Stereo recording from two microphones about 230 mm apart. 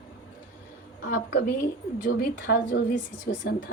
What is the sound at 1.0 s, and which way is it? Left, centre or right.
A woman's voice, left.